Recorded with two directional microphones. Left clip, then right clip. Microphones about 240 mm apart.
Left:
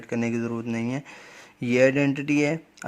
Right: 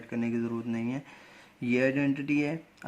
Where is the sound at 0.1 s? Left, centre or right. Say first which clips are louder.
Left 5 dB; left.